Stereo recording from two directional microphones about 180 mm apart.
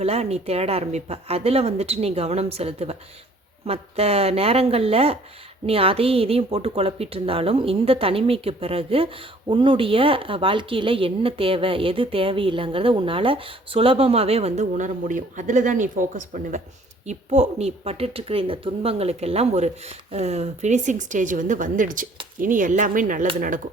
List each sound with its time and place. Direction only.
0.0 s a woman's voice: 35° right (ahead or behind)